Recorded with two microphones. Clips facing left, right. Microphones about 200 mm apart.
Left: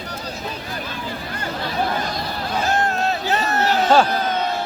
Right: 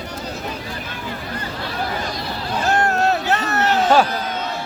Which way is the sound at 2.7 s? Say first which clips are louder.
Right 6 dB; 70° right (ahead or behind).